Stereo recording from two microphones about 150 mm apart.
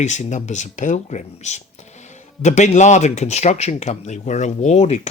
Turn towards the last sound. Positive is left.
turn(degrees=50)  # may be behind; listen again after turning